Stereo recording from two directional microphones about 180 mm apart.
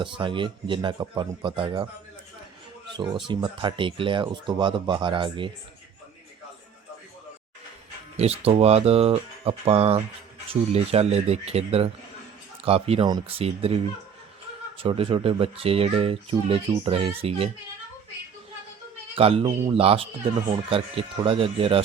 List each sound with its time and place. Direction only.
0.0 s speech: 30° right (ahead or behind)
3.2 s speech: 25° right (ahead or behind)
8.1 s speech: 35° right (ahead or behind)
14.8 s speech: 30° right (ahead or behind)
19.1 s speech: 30° right (ahead or behind)